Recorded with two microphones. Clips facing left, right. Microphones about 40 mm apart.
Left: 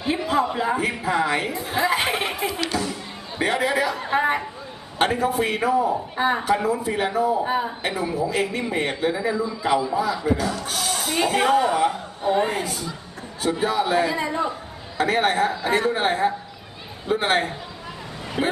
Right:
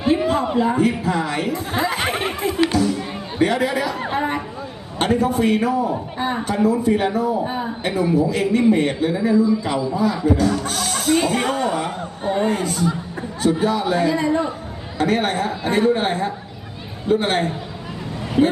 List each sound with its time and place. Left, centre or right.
0.5 s a man's voice: centre
2.7 s music: centre
4.1 s a man's voice: centre